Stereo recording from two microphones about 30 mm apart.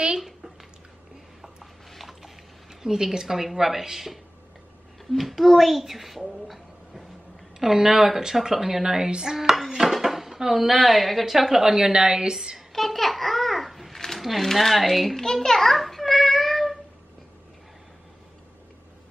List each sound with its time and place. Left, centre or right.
1.4 s a sound: centre
2.7 s speech: centre
5.1 s a child's voice: centre
7.5 s speech: centre
8.8 s a woman's voice: right
9.8 s speech: centre
11.6 s a woman's voice: centre
12.7 s babbling: centre
13.9 s a sound: centre
14.2 s a child's voice: centre
15.6 s child singing: centre